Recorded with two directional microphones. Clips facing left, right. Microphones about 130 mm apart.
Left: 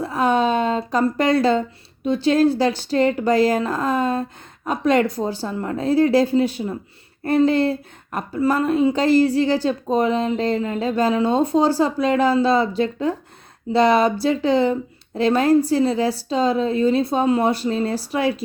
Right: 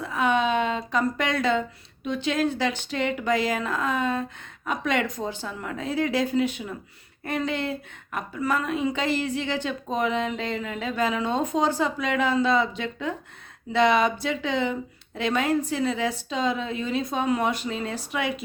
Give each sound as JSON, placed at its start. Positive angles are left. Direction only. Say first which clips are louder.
{"t": 0.0, "sound": "speech", "louder": "left 5 dB", "side_deg": 35}